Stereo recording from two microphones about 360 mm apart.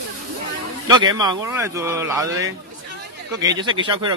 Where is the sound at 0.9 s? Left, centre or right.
Centre.